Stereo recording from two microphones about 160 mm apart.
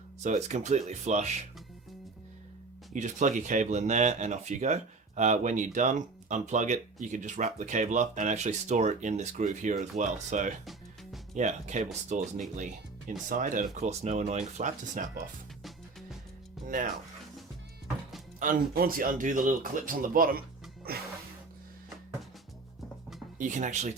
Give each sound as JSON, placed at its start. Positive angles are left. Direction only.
{"t": 0.2, "sound": "speech", "side_deg": -45}
{"t": 2.9, "sound": "speech", "side_deg": -50}
{"t": 15.6, "sound": "music", "side_deg": 0}
{"t": 16.6, "sound": "speech", "side_deg": -60}
{"t": 18.3, "sound": "speech", "side_deg": -60}
{"t": 20.9, "sound": "music", "side_deg": -70}
{"t": 23.4, "sound": "speech", "side_deg": -50}